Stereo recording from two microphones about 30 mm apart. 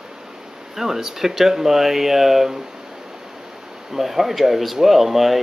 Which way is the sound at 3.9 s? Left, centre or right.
Centre.